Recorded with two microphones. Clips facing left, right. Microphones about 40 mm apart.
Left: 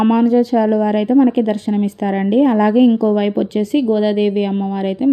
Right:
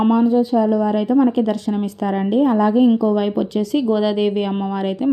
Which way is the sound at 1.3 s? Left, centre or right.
Left.